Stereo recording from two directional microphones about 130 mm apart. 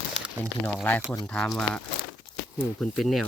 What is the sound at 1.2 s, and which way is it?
Speech, 5° left (ahead or behind).